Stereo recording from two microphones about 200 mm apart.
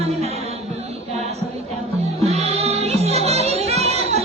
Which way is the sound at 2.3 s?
30° right (ahead or behind).